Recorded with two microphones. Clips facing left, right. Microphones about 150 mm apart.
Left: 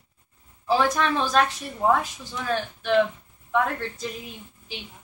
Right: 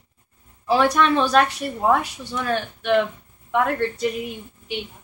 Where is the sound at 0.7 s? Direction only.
70° right (ahead or behind).